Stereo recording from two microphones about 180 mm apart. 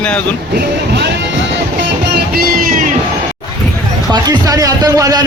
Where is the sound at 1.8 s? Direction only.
70° right (ahead or behind); by 2.9 s 50° right (ahead or behind).